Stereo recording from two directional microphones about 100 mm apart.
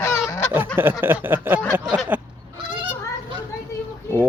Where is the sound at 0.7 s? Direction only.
20° right (ahead or behind).